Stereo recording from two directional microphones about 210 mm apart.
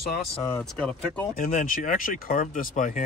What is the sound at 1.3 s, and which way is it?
Speech, 40° left (ahead or behind).